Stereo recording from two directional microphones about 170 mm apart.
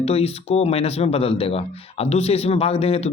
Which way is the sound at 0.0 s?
35° left (ahead or behind).